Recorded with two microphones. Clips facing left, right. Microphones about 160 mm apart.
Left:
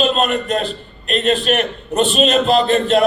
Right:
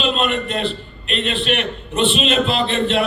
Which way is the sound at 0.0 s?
40° left (ahead or behind).